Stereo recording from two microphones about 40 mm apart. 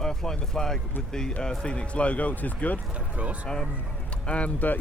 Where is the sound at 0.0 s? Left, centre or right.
Centre; by 2.7 s left.